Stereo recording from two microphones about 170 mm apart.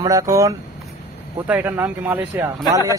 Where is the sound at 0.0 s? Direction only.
20° right (ahead or behind).